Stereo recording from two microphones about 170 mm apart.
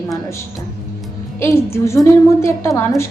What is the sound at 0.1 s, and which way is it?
A woman's voice, 15° left (ahead or behind).